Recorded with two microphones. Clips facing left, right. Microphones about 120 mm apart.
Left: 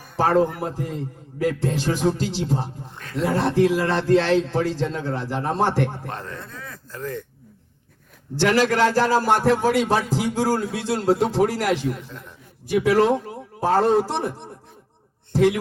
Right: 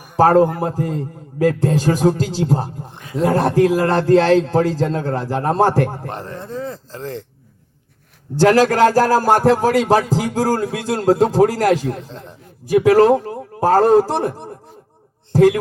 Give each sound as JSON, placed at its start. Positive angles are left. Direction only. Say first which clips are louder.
{"t": 0.2, "sound": "a man's voice", "louder": "right 6 dB", "side_deg": -45}
{"t": 6.1, "sound": "speech", "louder": "right 5 dB", "side_deg": -25}
{"t": 8.4, "sound": "a man's voice", "louder": "right 6 dB", "side_deg": -40}
{"t": 11.9, "sound": "a man's voice", "louder": "right 5 dB", "side_deg": -30}
{"t": 12.7, "sound": "a man's voice", "louder": "right 6 dB", "side_deg": -45}